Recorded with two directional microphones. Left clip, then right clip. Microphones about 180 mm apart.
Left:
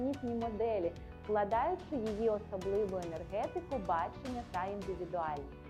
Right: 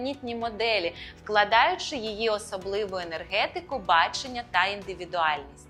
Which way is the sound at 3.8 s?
30° left (ahead or behind).